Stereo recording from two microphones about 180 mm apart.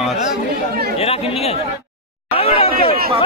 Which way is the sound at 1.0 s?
35° left (ahead or behind).